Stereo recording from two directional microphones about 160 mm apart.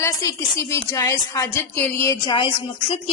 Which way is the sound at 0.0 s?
20° left (ahead or behind).